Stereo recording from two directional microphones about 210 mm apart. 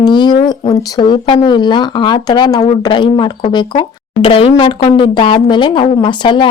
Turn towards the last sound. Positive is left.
turn(degrees=25)  # may be behind; listen again after turning